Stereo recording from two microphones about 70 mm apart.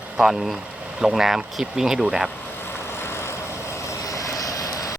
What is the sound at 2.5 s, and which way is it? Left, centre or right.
Vehicle, left.